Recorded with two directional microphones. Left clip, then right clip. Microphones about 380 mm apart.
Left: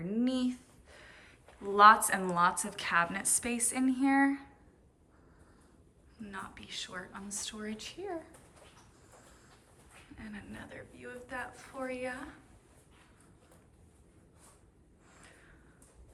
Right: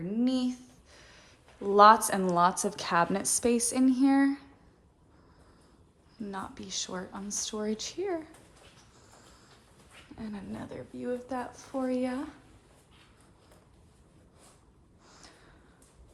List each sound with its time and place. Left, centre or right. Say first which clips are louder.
0.0 s speech: right 3 dB; centre
6.3 s a woman's voice: right 4 dB; centre
10.2 s a woman's voice: right 6 dB; centre